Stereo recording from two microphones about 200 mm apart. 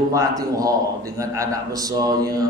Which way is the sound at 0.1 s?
15° right (ahead or behind).